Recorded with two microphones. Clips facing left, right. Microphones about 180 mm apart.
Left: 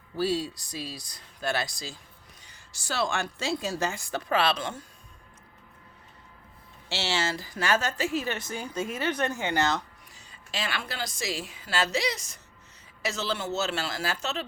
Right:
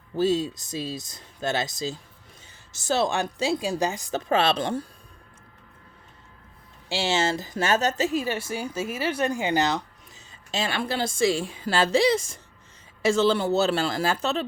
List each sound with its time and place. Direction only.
0.2 s a woman's voice: 20° right (ahead or behind)
6.8 s a woman's voice: 15° right (ahead or behind)
10.5 s a woman's voice: 25° right (ahead or behind)